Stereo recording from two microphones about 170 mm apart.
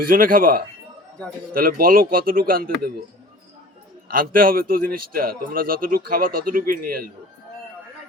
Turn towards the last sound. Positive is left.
turn(degrees=-55)  # may be behind; listen again after turning